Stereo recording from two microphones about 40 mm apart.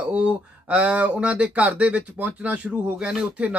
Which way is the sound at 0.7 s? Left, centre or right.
Right.